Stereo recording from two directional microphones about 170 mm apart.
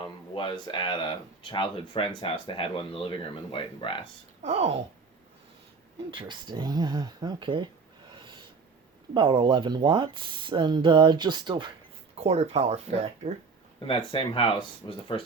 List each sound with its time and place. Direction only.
0.0 s speech: 30° left (ahead or behind)
4.4 s speech: 40° right (ahead or behind)
6.1 s speech: 30° right (ahead or behind)
8.1 s snort: 30° right (ahead or behind)
9.1 s speech: 30° right (ahead or behind)
12.1 s speech: 40° right (ahead or behind)
13.8 s speech: 30° left (ahead or behind)